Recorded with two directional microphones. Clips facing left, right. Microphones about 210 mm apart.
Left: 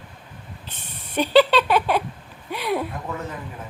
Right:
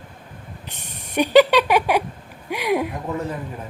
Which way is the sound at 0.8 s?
15° right (ahead or behind).